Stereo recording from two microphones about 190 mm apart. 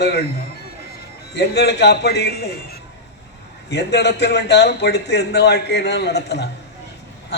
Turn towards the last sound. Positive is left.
turn(degrees=60)  # may be behind; listen again after turning